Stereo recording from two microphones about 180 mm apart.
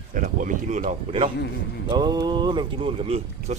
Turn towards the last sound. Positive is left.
turn(degrees=-35)  # may be behind; listen again after turning